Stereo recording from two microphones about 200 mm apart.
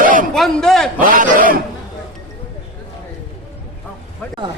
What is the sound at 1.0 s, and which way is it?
Speech, 45° right (ahead or behind).